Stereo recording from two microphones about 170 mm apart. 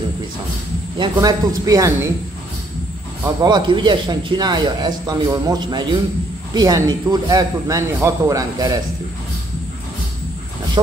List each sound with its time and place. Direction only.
0.9 s speech: 25° right (ahead or behind)
3.4 s speech: 25° right (ahead or behind)